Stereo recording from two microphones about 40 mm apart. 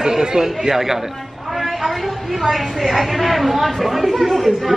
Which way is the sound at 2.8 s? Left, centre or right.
Centre.